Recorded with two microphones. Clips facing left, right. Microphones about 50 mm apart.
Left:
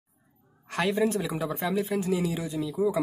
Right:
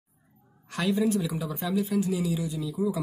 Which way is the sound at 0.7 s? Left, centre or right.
Left.